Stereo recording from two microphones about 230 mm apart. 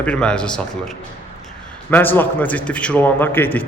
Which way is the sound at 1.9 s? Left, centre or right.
Centre.